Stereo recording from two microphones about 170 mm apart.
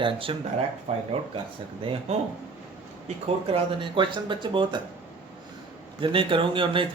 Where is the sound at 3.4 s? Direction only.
30° right (ahead or behind).